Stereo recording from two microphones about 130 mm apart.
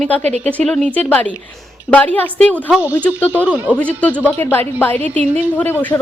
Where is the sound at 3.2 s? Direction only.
15° left (ahead or behind).